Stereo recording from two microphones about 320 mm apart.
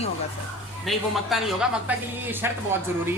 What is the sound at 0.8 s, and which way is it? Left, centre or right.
Speech, centre.